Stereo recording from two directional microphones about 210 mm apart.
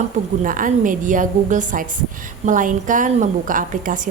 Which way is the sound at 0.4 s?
40° right (ahead or behind).